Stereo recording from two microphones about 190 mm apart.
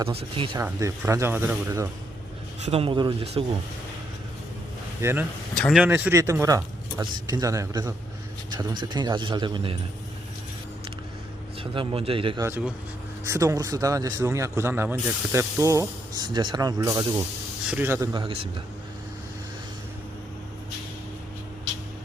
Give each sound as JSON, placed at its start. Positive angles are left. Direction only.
{"t": 0.1, "sound": "a man's voice", "side_deg": -30}
{"t": 0.6, "sound": "speech", "side_deg": -15}
{"t": 2.6, "sound": "a man's voice", "side_deg": -30}
{"t": 5.0, "sound": "speech", "side_deg": -15}
{"t": 5.5, "sound": "speech", "side_deg": 5}
{"t": 5.8, "sound": "a man's voice", "side_deg": -10}
{"t": 11.6, "sound": "a man's voice", "side_deg": -25}
{"t": 12.5, "sound": "speech", "side_deg": -10}
{"t": 18.1, "sound": "a man's voice", "side_deg": -25}